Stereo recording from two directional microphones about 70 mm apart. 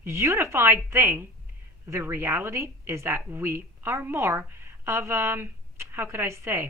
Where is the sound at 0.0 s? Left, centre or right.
Right.